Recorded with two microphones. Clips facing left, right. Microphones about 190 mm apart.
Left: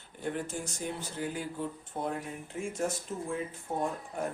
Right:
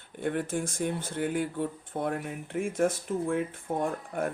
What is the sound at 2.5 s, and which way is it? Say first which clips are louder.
Speech: right 6 dB; 55° right (ahead or behind).